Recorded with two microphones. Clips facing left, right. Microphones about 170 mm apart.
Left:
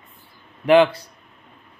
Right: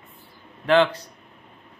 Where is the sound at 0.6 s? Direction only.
10° left (ahead or behind).